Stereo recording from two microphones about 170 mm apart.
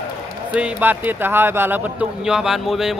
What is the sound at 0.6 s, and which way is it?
Speech, 10° right (ahead or behind).